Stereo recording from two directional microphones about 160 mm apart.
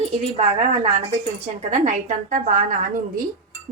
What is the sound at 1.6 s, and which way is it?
A woman's voice, 50° right (ahead or behind).